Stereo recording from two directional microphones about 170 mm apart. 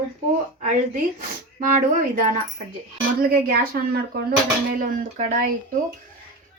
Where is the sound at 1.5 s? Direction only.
50° right (ahead or behind).